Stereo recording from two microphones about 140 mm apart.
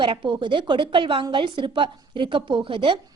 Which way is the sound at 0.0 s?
35° right (ahead or behind).